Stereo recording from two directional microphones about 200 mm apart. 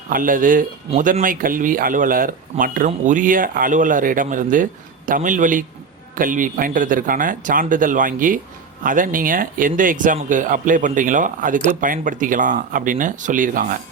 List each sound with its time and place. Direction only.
0.1 s a man's voice: 45° right (ahead or behind)